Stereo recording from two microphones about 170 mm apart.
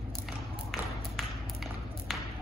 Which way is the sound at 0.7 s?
Centre (ahead or behind).